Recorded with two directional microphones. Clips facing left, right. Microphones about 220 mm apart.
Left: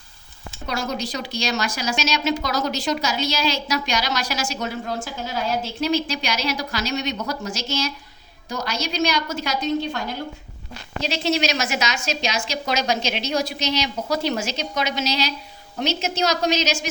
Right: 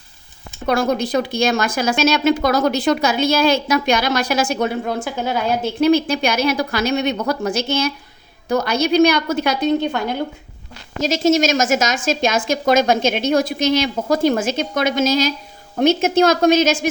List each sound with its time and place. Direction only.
0.7 s speech: 55° right (ahead or behind)
11.0 s a woman's voice: 45° right (ahead or behind)